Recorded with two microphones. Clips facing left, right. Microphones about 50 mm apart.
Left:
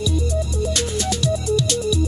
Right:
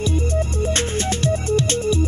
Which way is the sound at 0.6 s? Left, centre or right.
Right.